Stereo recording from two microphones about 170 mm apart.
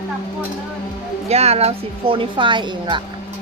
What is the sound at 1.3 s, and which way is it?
A woman's voice, 40° right (ahead or behind).